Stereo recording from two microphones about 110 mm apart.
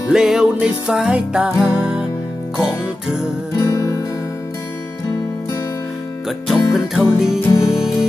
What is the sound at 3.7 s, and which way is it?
Music, 30° left (ahead or behind).